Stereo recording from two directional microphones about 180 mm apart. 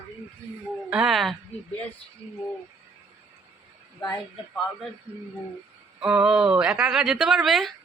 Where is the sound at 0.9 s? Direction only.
5° right (ahead or behind).